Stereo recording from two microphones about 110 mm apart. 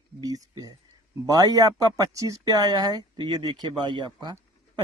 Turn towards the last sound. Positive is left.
turn(degrees=-40)  # may be behind; listen again after turning